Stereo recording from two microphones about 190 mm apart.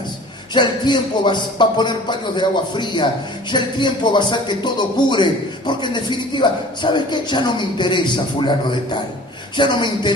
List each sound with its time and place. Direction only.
0.5 s speech: 25° left (ahead or behind)